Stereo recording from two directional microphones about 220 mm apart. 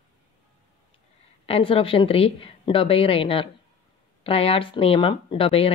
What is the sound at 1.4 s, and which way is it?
Speech, 25° left (ahead or behind).